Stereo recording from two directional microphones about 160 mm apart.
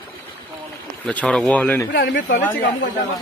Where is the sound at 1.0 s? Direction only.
10° left (ahead or behind).